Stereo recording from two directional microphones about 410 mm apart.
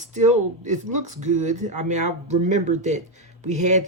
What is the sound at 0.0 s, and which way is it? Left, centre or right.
Speech, centre.